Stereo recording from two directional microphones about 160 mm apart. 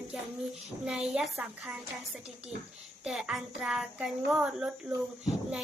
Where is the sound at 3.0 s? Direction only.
5° right (ahead or behind).